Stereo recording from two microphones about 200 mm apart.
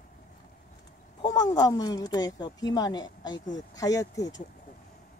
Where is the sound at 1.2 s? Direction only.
20° left (ahead or behind).